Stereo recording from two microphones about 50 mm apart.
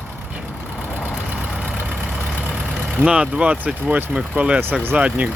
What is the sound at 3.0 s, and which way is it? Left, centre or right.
Speech, right.